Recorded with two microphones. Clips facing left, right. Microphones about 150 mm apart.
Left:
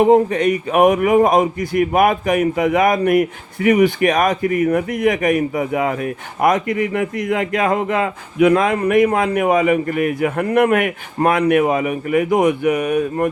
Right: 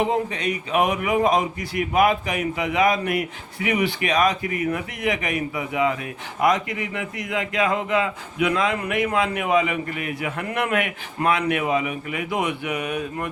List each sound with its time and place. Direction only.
0.0 s speech: 50° left (ahead or behind)